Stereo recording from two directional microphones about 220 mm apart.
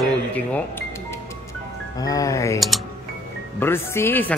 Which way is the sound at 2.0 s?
15° left (ahead or behind).